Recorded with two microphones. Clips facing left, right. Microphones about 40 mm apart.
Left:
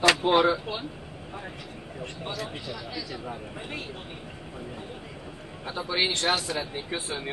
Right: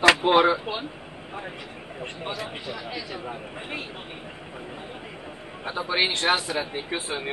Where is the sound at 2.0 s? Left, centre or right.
Right.